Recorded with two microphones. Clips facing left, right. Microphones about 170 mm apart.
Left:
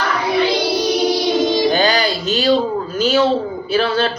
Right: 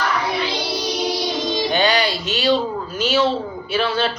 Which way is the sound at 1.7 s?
40° left (ahead or behind).